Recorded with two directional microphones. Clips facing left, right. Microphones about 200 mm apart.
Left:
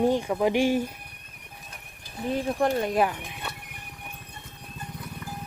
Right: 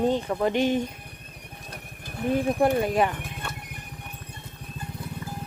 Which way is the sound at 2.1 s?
55° right (ahead or behind).